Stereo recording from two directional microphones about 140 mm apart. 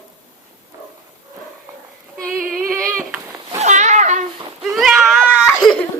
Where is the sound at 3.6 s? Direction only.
60° right (ahead or behind).